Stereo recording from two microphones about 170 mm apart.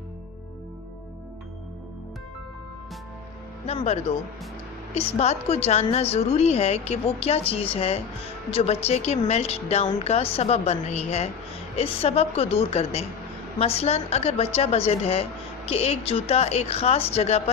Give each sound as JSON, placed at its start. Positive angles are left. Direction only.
{"t": 3.6, "sound": "a woman's voice", "side_deg": 40}